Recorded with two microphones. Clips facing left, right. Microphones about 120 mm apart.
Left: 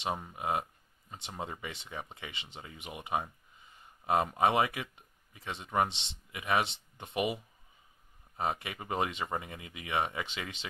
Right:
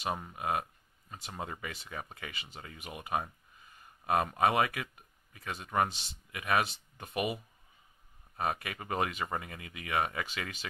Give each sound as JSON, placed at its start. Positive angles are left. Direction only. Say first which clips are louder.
{"t": 0.1, "sound": "speech", "louder": "even", "side_deg": 5}
{"t": 0.4, "sound": "speech", "louder": "even", "side_deg": 25}